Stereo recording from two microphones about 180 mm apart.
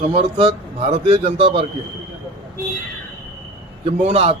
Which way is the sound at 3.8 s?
35° right (ahead or behind).